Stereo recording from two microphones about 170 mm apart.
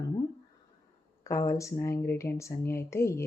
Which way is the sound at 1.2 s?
20° left (ahead or behind).